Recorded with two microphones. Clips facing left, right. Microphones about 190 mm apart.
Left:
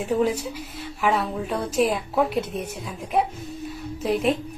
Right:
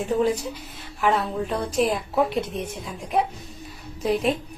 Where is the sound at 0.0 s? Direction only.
10° left (ahead or behind).